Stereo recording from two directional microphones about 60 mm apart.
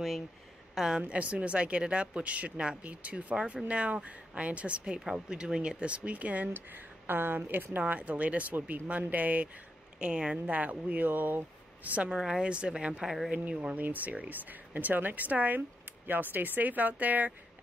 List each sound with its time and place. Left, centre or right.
0.7 s a woman's voice: centre
9.9 s a woman's voice: centre
12.1 s a woman's voice: centre; by 17.3 s right